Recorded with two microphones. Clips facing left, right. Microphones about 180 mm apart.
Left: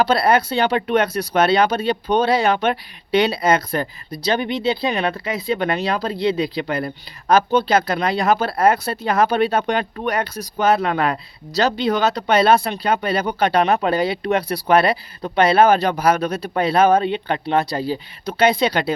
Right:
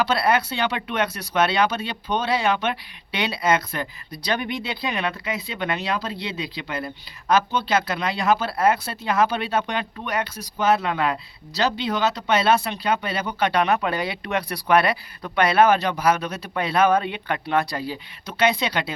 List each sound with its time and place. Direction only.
0.0 s speech: 35° left (ahead or behind)